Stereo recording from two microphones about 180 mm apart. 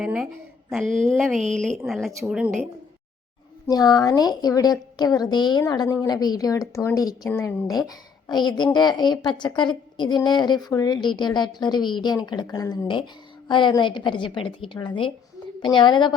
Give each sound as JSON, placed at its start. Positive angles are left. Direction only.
{"t": 0.0, "sound": "a sound", "side_deg": -5}
{"t": 0.7, "sound": "a woman's voice", "side_deg": 0}
{"t": 3.7, "sound": "a woman's voice", "side_deg": 20}